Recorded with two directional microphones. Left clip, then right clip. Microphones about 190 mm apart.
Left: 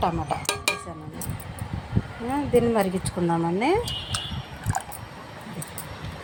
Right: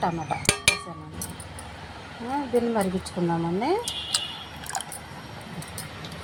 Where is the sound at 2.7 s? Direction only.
20° left (ahead or behind).